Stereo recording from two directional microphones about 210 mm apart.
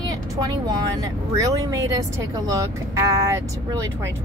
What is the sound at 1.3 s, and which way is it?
A woman's voice, 15° right (ahead or behind).